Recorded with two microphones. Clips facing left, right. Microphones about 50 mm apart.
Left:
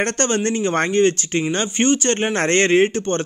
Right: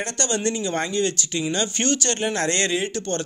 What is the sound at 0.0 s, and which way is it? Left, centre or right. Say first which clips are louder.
Speech: left 5 dB; left.